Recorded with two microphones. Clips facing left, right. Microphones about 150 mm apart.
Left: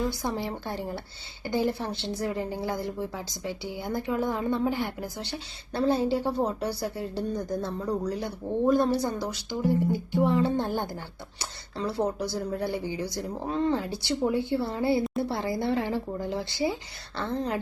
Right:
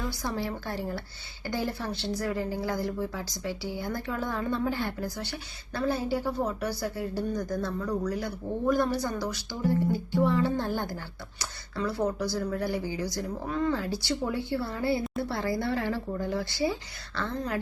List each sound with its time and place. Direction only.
0.1 s a woman's voice: 20° left (ahead or behind)